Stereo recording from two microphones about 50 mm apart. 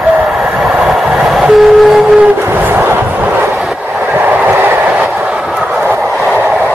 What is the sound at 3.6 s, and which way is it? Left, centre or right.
Train, centre.